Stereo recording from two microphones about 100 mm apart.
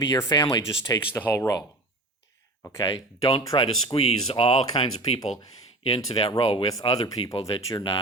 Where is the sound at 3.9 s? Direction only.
70° left (ahead or behind); by 5.5 s 50° left (ahead or behind).